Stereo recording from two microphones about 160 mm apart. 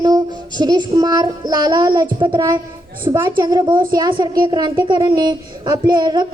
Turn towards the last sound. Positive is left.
turn(degrees=-30)  # may be behind; listen again after turning